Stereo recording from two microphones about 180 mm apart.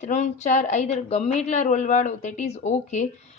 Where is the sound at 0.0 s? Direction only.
40° left (ahead or behind).